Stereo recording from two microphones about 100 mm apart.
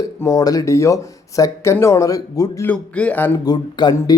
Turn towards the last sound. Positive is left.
turn(degrees=40)  # may be behind; listen again after turning